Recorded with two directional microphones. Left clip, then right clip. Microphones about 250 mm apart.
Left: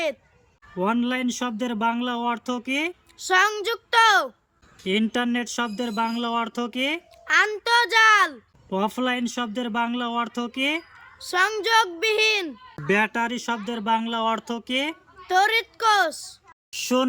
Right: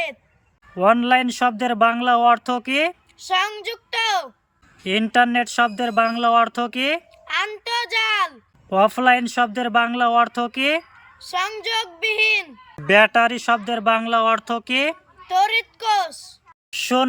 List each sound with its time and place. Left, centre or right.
0.8 s speech: centre
3.2 s speech: centre
4.8 s speech: centre
7.3 s speech: centre
8.7 s speech: centre
11.3 s speech: centre
12.7 s speech: centre
15.3 s speech: centre
16.1 s a woman's voice: left
16.7 s speech: centre